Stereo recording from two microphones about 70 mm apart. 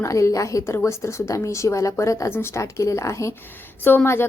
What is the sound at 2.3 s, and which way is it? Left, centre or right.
A woman's voice, left.